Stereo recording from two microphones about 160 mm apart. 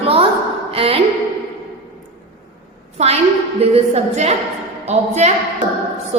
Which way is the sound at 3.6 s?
40° right (ahead or behind).